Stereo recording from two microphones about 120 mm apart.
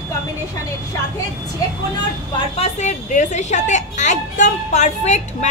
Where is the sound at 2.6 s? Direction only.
80° left.